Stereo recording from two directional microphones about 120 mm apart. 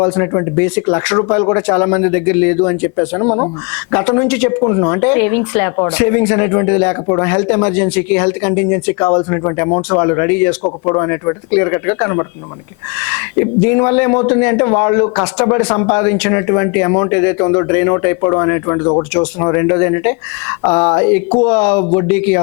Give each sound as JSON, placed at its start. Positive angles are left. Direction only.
{"t": 0.0, "sound": "speech", "side_deg": 25}